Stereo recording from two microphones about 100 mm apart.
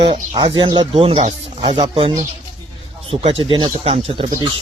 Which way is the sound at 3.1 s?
75° right (ahead or behind).